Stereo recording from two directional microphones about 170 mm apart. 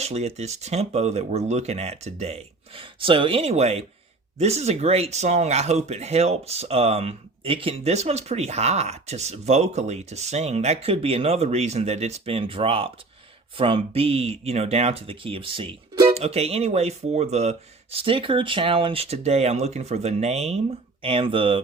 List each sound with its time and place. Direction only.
0.0 s speech: 40° right (ahead or behind)